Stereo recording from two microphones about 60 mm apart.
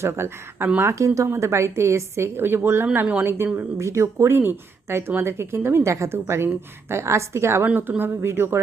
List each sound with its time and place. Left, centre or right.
0.0 s speech: right
3.8 s speech: right
4.4 s speech: right
7.8 s speech: right